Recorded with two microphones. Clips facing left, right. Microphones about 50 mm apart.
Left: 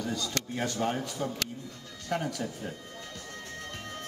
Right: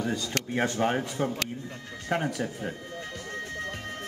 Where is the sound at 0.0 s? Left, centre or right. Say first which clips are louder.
Right 3 dB; right.